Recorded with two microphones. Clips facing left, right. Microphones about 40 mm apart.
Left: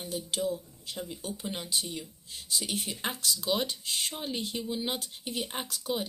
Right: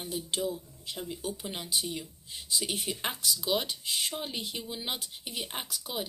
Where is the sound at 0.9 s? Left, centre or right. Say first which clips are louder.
Right 1 dB; centre.